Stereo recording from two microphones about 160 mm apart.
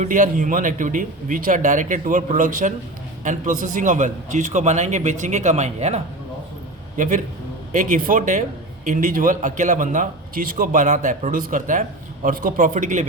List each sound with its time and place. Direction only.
0.0 s a man's voice: 50° right (ahead or behind)